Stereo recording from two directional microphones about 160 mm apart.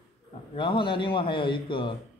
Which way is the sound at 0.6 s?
30° left (ahead or behind).